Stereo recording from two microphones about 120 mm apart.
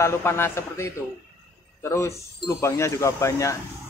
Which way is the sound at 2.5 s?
25° left (ahead or behind).